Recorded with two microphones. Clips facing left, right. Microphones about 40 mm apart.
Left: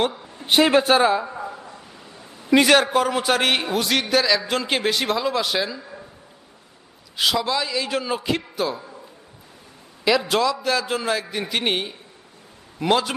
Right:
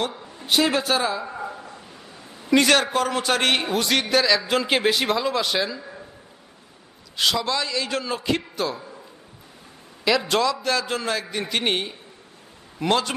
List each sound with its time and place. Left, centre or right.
0.3 s speech: left
1.2 s a sound: centre
2.5 s a man's voice: centre
7.2 s a man's voice: centre
10.0 s a man's voice: centre